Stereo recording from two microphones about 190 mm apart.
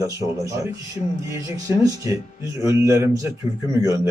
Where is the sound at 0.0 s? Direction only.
15° right (ahead or behind).